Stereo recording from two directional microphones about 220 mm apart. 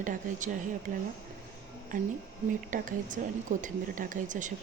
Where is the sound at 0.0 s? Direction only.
35° right (ahead or behind).